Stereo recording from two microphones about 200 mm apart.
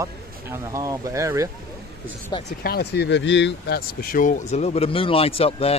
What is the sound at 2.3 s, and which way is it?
Speech, 25° left (ahead or behind).